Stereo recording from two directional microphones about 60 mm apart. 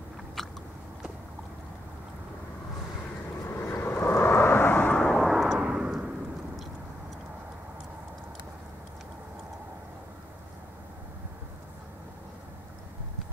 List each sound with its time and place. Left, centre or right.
0.4 s biting: centre
3.4 s vehicle: left
4.9 s vehicle: centre
5.3 s vehicle: centre
5.6 s a sound: centre